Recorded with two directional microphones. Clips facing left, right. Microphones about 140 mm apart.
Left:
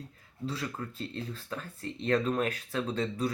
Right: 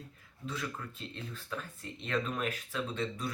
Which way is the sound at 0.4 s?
35° left (ahead or behind).